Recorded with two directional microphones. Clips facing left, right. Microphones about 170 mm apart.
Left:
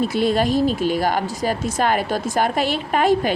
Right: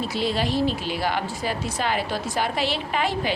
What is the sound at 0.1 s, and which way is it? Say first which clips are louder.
Speech: left 6 dB; 50° left (ahead or behind).